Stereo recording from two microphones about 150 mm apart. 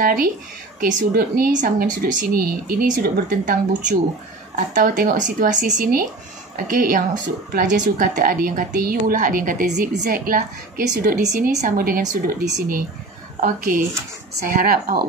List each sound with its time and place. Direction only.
0.0 s a woman's voice: 70° right (ahead or behind)
2.1 s a woman's voice: 75° right (ahead or behind)
4.6 s a woman's voice: 60° right (ahead or behind)
7.5 s a woman's voice: 55° right (ahead or behind); by 11.2 s 75° right (ahead or behind)
11.2 s a woman's voice: 55° right (ahead or behind); by 15.0 s 75° right (ahead or behind)